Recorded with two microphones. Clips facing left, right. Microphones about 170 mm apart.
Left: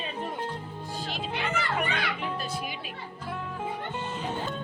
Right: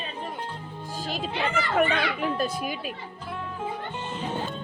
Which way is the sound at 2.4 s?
45° right (ahead or behind).